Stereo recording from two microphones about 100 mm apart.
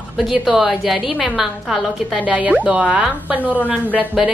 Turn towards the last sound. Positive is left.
turn(degrees=-15)  # may be behind; listen again after turning